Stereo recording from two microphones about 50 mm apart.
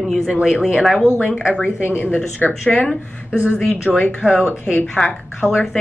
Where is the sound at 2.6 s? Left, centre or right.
Left.